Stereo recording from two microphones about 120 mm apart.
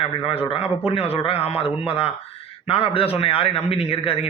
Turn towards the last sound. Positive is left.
turn(degrees=50)  # may be behind; listen again after turning